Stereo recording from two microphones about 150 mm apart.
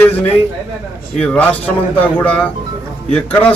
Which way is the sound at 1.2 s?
10° left (ahead or behind).